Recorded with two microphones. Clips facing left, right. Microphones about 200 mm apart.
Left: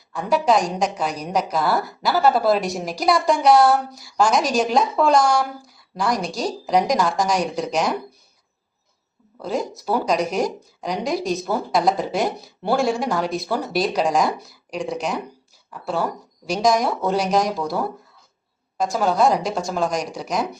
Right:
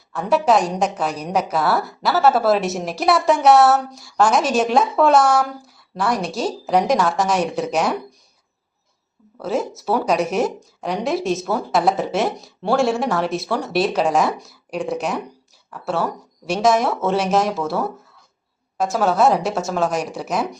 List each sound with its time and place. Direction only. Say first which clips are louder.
0.1 s a woman's voice: right 2 dB; centre (ahead or behind)
9.4 s a woman's voice: right 2 dB; 5° right (ahead or behind)
18.8 s a woman's voice: right 2 dB; 5° right (ahead or behind)